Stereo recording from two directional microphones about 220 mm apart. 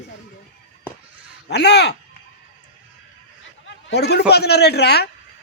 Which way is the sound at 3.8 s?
50° left (ahead or behind).